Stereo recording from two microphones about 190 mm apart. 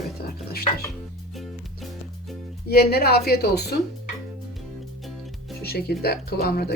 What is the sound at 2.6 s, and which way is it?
Speech, 55° left (ahead or behind).